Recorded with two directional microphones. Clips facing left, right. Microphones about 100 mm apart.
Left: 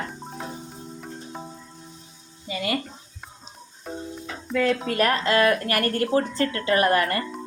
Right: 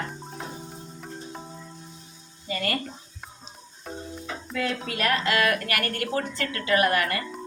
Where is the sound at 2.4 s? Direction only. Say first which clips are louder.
Left 2 dB; 10° left (ahead or behind).